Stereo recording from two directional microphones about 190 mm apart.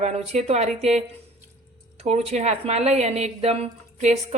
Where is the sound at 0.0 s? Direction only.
35° right (ahead or behind).